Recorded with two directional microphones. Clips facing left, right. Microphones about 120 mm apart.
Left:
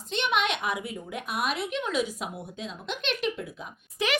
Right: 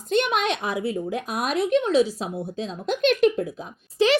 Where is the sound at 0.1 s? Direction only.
45° right (ahead or behind).